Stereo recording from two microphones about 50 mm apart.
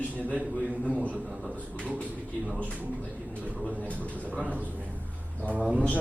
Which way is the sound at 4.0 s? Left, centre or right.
Left.